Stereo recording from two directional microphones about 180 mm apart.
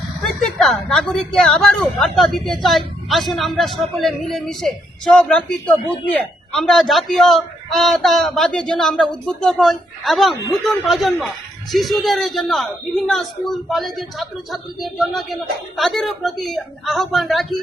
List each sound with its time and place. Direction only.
0.2 s a woman's voice: centre (ahead or behind)